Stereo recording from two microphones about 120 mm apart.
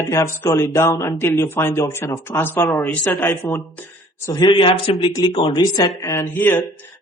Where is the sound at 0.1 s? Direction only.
25° left (ahead or behind).